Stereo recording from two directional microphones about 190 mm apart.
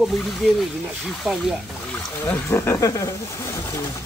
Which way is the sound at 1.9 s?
10° left (ahead or behind).